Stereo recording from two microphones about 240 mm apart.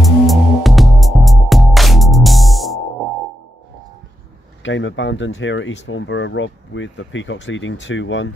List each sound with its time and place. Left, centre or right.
0.0 s music: centre
4.6 s speech: left